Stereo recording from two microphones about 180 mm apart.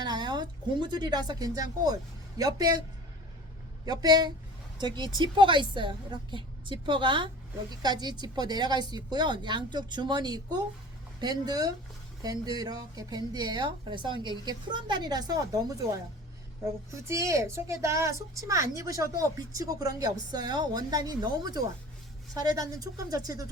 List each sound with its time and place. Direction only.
0.0 s a woman's voice: 25° right (ahead or behind)
3.8 s a woman's voice: 20° right (ahead or behind)